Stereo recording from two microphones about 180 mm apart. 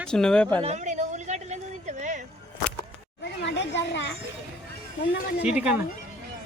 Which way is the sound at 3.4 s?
80° left.